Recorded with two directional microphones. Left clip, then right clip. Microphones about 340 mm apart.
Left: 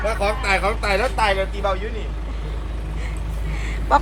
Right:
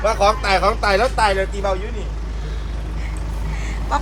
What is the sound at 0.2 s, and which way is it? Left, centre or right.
Speech, right.